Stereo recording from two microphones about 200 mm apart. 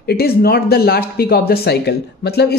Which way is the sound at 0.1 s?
50° left (ahead or behind).